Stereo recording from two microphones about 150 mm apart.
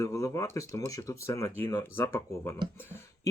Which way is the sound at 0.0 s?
20° left (ahead or behind).